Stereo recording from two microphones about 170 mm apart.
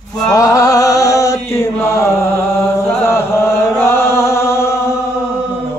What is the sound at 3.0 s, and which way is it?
Chant, 15° left (ahead or behind).